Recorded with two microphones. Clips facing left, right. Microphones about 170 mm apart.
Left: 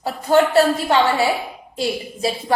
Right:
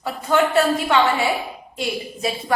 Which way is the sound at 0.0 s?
35° left (ahead or behind).